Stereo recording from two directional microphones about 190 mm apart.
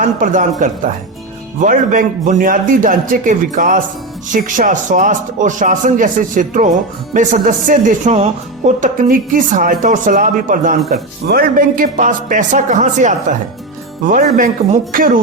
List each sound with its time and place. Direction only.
0.0 s speech: 45° right (ahead or behind)